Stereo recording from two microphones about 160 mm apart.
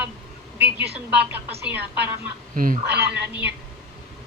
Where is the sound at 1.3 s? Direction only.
10° right (ahead or behind).